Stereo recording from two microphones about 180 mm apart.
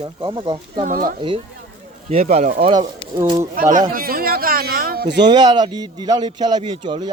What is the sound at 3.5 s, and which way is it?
A man's voice, 50° right (ahead or behind).